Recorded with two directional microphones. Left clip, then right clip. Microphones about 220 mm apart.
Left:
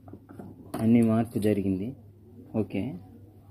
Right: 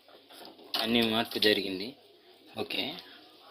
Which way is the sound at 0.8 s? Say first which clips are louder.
Left 3 dB; 30° right (ahead or behind).